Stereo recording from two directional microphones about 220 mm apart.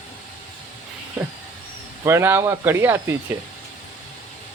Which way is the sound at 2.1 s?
10° right (ahead or behind).